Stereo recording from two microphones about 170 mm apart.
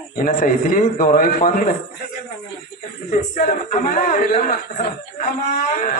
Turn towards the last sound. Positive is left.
turn(degrees=55)  # may be behind; listen again after turning